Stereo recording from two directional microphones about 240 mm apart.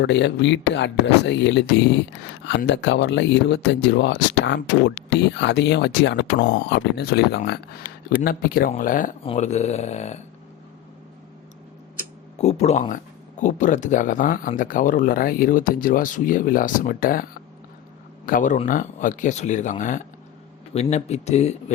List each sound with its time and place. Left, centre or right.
0.0 s speech: left
2.6 s speech: left
12.4 s speech: left
18.3 s speech: left